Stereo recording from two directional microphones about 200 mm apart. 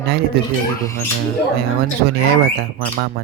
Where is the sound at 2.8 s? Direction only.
50° right (ahead or behind).